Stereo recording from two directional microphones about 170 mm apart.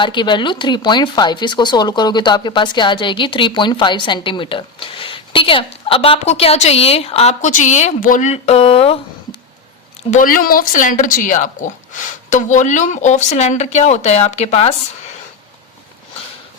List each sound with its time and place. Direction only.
0.0 s a woman's voice: 25° left (ahead or behind)
10.1 s speech: 50° left (ahead or behind)